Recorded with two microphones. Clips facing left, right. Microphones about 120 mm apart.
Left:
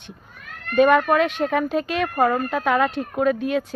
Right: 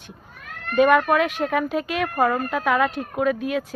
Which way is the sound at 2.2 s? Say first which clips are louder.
Left 1 dB; 15° left (ahead or behind).